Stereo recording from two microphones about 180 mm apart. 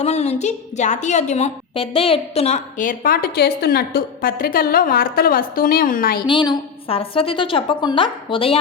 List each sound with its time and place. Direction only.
0.0 s a woman's voice: 35° left (ahead or behind); by 6.2 s 55° left (ahead or behind)
6.2 s a woman's voice: 25° left (ahead or behind)